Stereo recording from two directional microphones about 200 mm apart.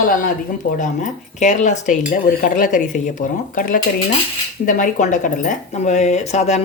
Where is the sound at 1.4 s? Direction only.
35° left (ahead or behind).